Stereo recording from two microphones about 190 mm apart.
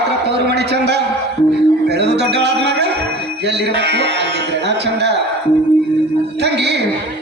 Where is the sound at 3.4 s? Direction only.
60° right (ahead or behind).